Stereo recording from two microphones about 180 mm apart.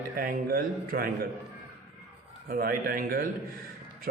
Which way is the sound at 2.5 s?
55° right (ahead or behind).